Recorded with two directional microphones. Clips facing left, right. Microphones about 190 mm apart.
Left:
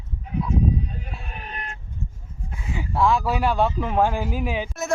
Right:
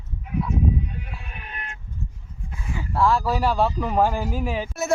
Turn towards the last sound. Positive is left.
turn(degrees=0)  # may be behind; listen again after turning